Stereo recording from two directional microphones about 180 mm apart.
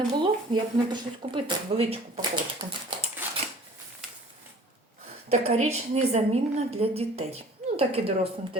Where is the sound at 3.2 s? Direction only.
10° right (ahead or behind).